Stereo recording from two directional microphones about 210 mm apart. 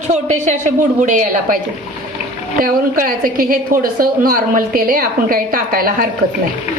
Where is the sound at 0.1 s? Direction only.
35° right (ahead or behind).